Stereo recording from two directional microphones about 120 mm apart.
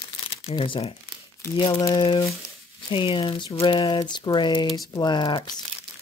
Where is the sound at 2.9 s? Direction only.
40° left (ahead or behind).